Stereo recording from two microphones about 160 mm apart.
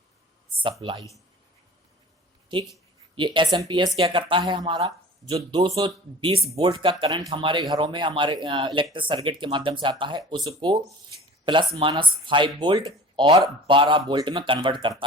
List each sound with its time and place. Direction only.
0.6 s a man's voice: 30° right (ahead or behind)
3.2 s a man's voice: 30° right (ahead or behind)